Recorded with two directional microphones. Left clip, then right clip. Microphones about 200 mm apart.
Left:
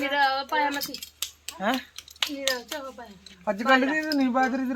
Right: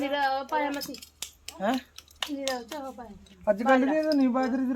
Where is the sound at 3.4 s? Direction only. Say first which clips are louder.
Left 1 dB; 10° left (ahead or behind).